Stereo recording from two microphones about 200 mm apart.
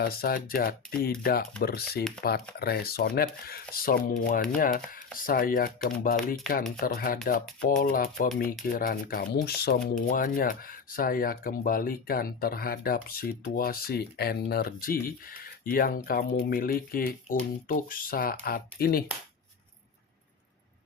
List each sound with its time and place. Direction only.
0.0 s speech: 50° left (ahead or behind)
6.1 s speech: centre (ahead or behind)
6.8 s speech: 45° left (ahead or behind)